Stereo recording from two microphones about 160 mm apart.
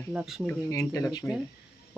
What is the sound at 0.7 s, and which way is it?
Speech, 20° left (ahead or behind).